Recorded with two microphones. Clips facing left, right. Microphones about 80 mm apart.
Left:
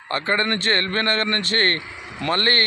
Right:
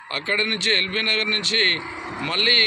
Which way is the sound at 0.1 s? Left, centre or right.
Left.